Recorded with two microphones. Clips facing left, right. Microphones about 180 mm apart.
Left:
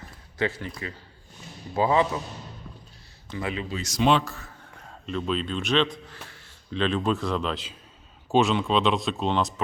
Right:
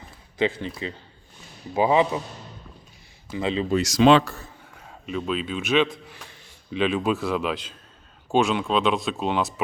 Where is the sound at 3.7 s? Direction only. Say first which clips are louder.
Right 6 dB; 85° right.